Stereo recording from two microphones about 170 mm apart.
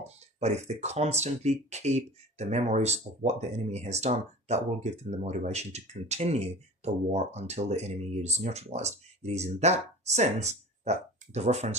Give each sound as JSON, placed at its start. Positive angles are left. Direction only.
{"t": 0.0, "sound": "speech", "side_deg": -40}